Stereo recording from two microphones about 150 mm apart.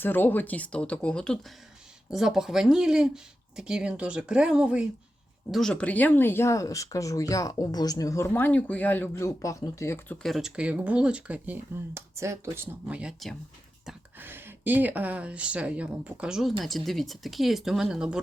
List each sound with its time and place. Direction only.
0.0 s speech: 15° left (ahead or behind)
10.2 s speech: centre (ahead or behind); by 12.6 s 20° right (ahead or behind)
12.9 s speech: 5° right (ahead or behind)
14.2 s speech: 15° right (ahead or behind)